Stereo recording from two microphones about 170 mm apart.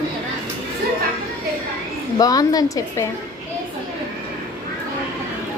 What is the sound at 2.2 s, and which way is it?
Speech, 20° left (ahead or behind).